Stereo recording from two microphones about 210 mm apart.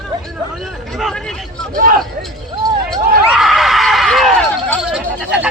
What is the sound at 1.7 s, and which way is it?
Speech, 40° right (ahead or behind).